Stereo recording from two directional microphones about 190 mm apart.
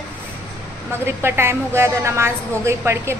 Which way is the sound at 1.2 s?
15° right (ahead or behind).